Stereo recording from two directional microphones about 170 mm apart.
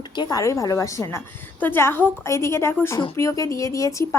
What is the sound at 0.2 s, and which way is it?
A woman's voice, 20° left (ahead or behind).